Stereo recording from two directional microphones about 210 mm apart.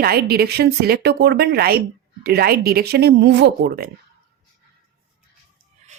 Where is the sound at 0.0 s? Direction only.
45° right (ahead or behind).